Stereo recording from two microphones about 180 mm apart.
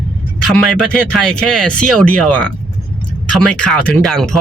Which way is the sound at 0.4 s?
5° left (ahead or behind).